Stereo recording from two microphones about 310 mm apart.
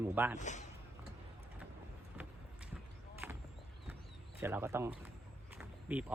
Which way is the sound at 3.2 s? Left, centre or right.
Centre.